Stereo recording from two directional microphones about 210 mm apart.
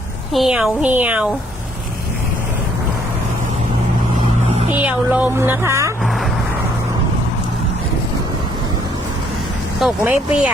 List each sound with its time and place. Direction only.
0.3 s a woman's voice: centre (ahead or behind)
4.8 s speech: 5° right (ahead or behind)
9.8 s speech: 5° right (ahead or behind)